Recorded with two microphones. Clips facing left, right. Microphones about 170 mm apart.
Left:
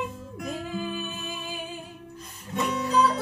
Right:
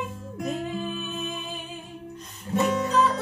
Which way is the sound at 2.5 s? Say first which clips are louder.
Right 5 dB; 45° right (ahead or behind).